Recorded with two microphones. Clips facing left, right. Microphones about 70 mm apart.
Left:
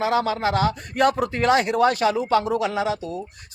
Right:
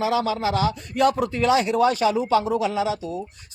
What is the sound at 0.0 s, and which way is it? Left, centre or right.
Speech, left.